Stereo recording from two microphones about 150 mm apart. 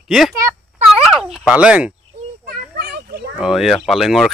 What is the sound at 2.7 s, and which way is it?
Children playing, 90° right.